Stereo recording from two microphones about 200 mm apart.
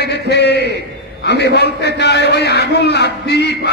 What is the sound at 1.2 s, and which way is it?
A man's voice, 55° left (ahead or behind).